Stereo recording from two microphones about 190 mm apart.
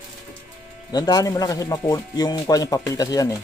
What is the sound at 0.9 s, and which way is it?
Speech, 20° left (ahead or behind).